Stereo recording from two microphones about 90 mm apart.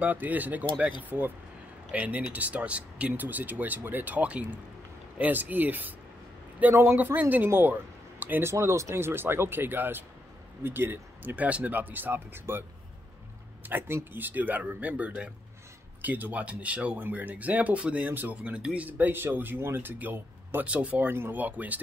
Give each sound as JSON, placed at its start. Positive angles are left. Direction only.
{"t": 0.0, "sound": "speech", "side_deg": -20}
{"t": 1.9, "sound": "speech", "side_deg": -15}